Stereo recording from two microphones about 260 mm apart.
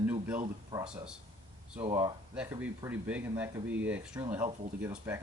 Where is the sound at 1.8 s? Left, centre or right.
Centre.